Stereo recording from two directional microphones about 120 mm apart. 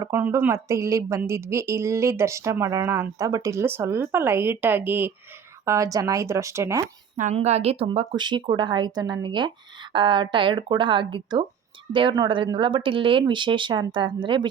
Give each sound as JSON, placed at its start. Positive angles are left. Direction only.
{"t": 0.2, "sound": "speech", "side_deg": -20}
{"t": 5.6, "sound": "speech", "side_deg": -25}
{"t": 7.3, "sound": "a woman's voice", "side_deg": -60}
{"t": 8.1, "sound": "a woman's voice", "side_deg": -40}